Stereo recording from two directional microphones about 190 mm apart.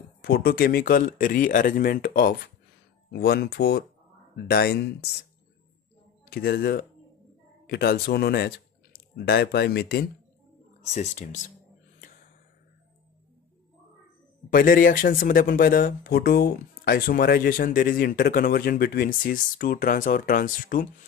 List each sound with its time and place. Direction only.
0.2 s speech: 50° left (ahead or behind)
6.3 s speech: 55° left (ahead or behind)
10.9 s speech: 40° left (ahead or behind)
14.5 s speech: 45° left (ahead or behind)